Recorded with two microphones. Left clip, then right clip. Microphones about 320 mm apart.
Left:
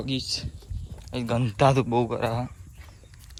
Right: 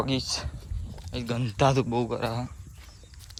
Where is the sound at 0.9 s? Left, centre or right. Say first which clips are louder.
Left 5 dB; centre.